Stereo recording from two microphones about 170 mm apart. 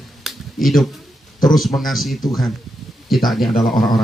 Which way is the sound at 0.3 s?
Centre (ahead or behind).